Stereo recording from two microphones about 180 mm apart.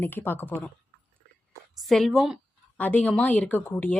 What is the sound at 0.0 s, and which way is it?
Speech, 10° left (ahead or behind).